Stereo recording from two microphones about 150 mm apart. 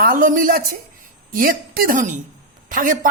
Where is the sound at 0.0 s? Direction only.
65° right (ahead or behind).